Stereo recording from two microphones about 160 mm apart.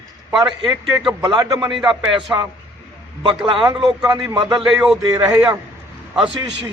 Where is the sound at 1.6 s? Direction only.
Centre (ahead or behind).